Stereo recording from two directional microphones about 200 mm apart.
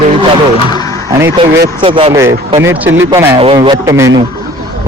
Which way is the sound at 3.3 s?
25° right (ahead or behind).